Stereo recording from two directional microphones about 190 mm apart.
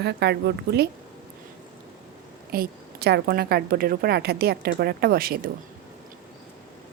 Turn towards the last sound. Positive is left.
turn(degrees=-50)  # may be behind; listen again after turning